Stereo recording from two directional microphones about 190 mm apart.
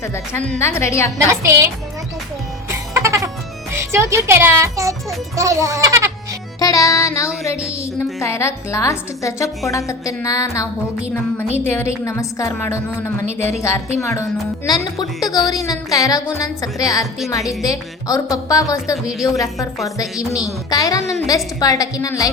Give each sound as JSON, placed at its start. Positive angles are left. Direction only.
{"t": 0.6, "sound": "speech", "side_deg": 15}
{"t": 1.3, "sound": "a child's voice", "side_deg": -15}
{"t": 2.6, "sound": "music", "side_deg": -15}
{"t": 3.8, "sound": "a child's voice", "side_deg": -15}
{"t": 6.6, "sound": "music", "side_deg": 20}
{"t": 7.9, "sound": "speech", "side_deg": 15}
{"t": 11.7, "sound": "a woman's voice", "side_deg": 15}